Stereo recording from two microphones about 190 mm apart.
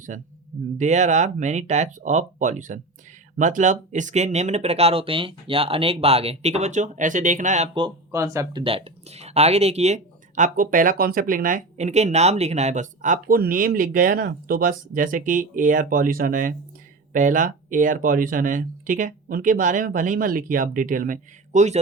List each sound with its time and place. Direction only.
0.1 s speech: 40° right (ahead or behind)
7.7 s speech: 25° right (ahead or behind)
8.1 s speech: 15° right (ahead or behind)
8.6 s speech: 30° right (ahead or behind)